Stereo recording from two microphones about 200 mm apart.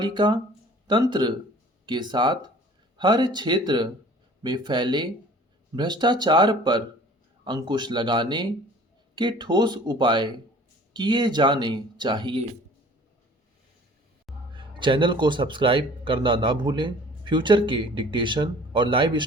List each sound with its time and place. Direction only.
0.0 s speech: 25° right (ahead or behind)
14.5 s speech: 25° right (ahead or behind)